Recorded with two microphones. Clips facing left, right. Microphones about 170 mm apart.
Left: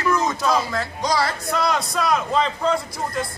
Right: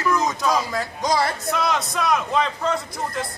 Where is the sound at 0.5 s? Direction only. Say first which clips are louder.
Left 1 dB; 20° right (ahead or behind).